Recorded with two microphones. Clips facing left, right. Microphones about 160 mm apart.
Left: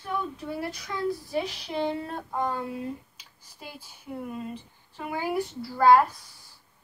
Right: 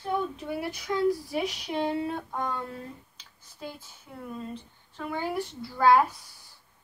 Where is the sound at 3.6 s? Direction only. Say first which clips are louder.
Right 3 dB; 10° left (ahead or behind).